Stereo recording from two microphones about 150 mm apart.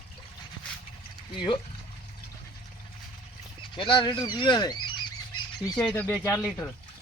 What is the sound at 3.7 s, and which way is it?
Speech, 35° left (ahead or behind).